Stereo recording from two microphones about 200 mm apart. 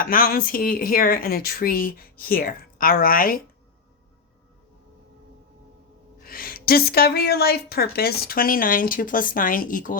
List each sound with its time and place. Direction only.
0.0 s a woman's voice: 45° left (ahead or behind)
6.2 s a woman's voice: 45° left (ahead or behind)